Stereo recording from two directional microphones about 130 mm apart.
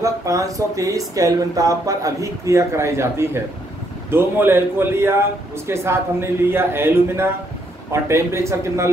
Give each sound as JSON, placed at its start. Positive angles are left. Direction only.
{"t": 0.0, "sound": "a man's voice", "side_deg": -25}